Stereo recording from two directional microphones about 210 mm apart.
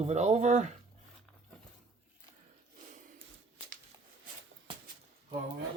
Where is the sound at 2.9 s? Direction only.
35° right (ahead or behind).